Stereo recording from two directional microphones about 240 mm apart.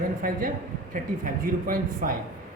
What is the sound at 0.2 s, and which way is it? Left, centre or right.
A man's voice, right.